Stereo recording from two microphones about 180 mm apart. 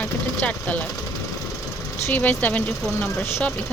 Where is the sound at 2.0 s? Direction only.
10° left (ahead or behind).